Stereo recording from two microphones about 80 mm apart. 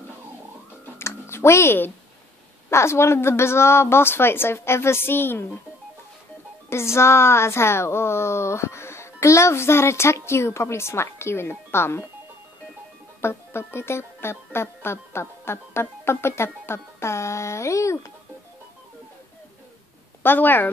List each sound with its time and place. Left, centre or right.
0.9 s a sound: left
2.7 s speech: left
6.7 s speech: left
13.2 s speech: left
20.2 s speech: left